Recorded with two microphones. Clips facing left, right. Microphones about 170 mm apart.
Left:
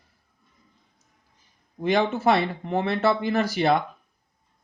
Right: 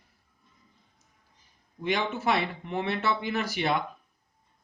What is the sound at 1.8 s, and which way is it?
Speech, 40° left (ahead or behind).